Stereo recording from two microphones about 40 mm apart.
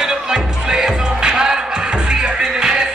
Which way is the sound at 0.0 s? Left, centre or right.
Centre.